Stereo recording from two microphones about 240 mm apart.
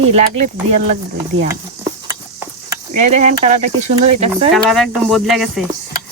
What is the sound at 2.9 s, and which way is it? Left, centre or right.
Speech, right.